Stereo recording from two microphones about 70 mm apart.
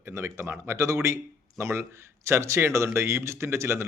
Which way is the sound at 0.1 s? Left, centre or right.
Right.